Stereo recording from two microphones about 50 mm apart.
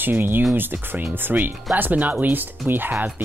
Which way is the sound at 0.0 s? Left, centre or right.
Right.